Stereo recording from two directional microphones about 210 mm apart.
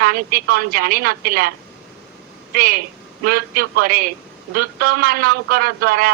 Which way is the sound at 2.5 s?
45° right (ahead or behind).